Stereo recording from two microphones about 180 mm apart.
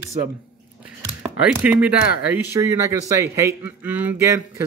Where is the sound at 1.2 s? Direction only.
5° right (ahead or behind).